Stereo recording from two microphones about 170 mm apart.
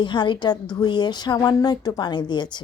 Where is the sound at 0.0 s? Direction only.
30° left (ahead or behind).